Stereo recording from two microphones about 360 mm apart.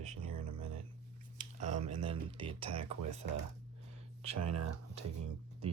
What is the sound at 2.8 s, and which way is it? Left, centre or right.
Speech, right.